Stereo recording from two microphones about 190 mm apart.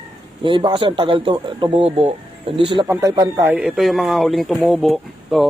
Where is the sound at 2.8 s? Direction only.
20° right (ahead or behind); by 5.5 s centre (ahead or behind).